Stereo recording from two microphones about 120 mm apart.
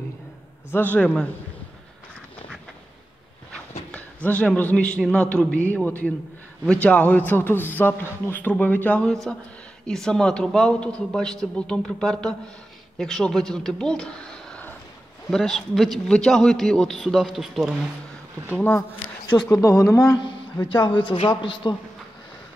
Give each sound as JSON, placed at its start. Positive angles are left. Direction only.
{"t": 0.7, "sound": "a man's voice", "side_deg": 15}
{"t": 3.9, "sound": "a man's voice", "side_deg": 10}
{"t": 18.5, "sound": "a man's voice", "side_deg": 20}
{"t": 20.6, "sound": "a man's voice", "side_deg": 40}